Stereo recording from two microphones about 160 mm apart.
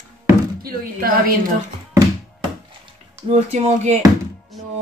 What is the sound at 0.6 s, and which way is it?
Speech, 65° right (ahead or behind).